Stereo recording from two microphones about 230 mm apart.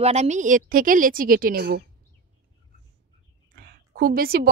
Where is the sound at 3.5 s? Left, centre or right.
Right.